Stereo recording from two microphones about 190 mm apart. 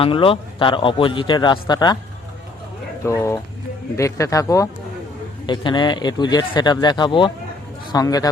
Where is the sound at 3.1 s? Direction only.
15° left (ahead or behind).